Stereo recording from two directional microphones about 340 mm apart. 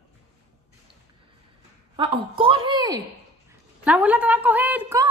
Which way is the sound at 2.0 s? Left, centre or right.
Centre.